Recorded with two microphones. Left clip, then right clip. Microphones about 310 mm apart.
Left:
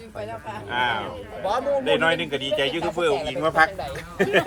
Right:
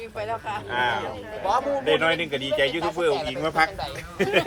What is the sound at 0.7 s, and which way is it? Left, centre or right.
Speech, left.